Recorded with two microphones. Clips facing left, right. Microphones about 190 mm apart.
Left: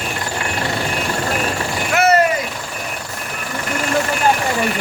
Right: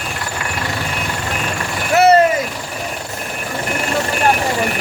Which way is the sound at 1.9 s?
35° right (ahead or behind).